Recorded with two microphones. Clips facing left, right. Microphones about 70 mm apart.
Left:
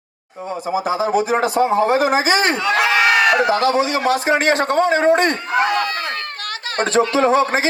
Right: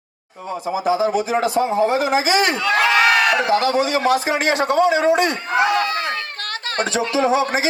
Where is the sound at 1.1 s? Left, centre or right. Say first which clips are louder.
Left 2 dB; left.